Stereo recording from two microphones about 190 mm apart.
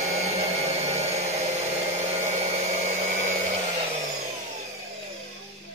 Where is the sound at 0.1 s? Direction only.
35° right (ahead or behind).